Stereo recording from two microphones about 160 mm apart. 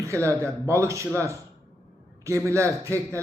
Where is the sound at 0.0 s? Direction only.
20° right (ahead or behind).